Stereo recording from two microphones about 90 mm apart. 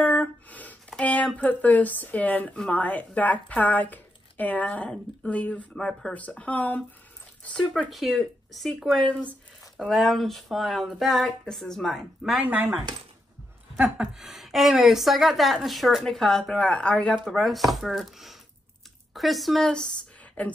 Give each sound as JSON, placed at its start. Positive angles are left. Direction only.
{"t": 0.0, "sound": "speech", "side_deg": 20}
{"t": 7.4, "sound": "a woman's voice", "side_deg": 5}
{"t": 9.1, "sound": "speech", "side_deg": 15}
{"t": 9.8, "sound": "a woman's voice", "side_deg": 0}
{"t": 12.4, "sound": "speech", "side_deg": -25}
{"t": 13.8, "sound": "a woman's voice", "side_deg": -5}
{"t": 20.4, "sound": "speech", "side_deg": 15}